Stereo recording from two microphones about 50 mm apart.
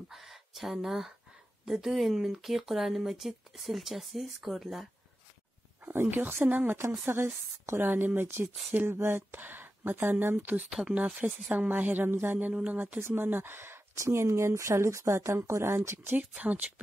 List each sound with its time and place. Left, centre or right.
0.1 s a sound: centre
0.8 s speech: centre
5.9 s speech: right
6.4 s a woman's voice: right
7.1 s speech: right
10.7 s speech: centre
11.4 s a woman's voice: right
13.9 s speech: right
16.0 s speech: right